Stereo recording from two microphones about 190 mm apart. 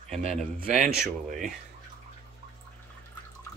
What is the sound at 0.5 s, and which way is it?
Speech, 45° right (ahead or behind).